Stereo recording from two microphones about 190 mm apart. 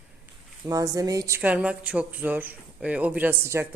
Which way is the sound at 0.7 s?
20° right (ahead or behind).